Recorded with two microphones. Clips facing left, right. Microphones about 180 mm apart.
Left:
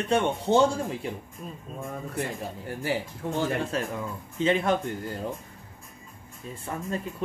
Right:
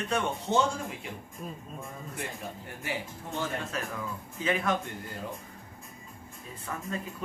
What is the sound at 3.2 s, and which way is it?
Speech, 65° left (ahead or behind).